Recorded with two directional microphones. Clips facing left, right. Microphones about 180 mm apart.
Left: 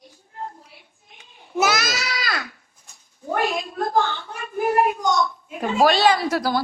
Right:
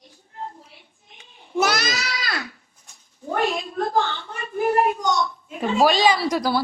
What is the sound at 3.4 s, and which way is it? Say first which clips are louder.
Speech: right 1 dB; 5° left (ahead or behind).